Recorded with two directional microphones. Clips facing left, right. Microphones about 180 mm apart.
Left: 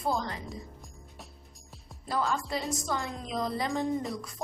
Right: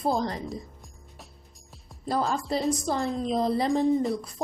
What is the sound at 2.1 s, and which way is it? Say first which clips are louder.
A woman's voice: right 4 dB; 35° right (ahead or behind).